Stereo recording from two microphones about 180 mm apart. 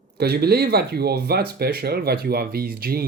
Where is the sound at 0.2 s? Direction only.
65° right (ahead or behind).